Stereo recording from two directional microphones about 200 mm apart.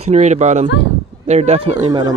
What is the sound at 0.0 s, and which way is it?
Speech, 35° right (ahead or behind).